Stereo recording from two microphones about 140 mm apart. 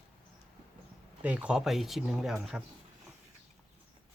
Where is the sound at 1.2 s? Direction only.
5° right (ahead or behind).